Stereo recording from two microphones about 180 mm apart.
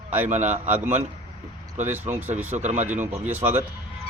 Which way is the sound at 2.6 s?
40° right (ahead or behind).